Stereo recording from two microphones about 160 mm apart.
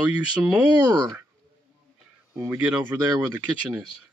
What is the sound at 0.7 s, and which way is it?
Speech, 25° right (ahead or behind).